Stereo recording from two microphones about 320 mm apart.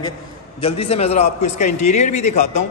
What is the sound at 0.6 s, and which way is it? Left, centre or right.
A man's voice, centre.